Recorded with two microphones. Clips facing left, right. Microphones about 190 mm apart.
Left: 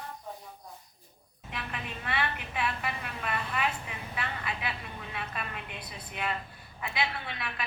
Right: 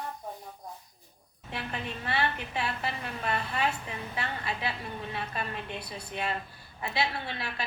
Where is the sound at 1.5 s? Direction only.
30° right (ahead or behind).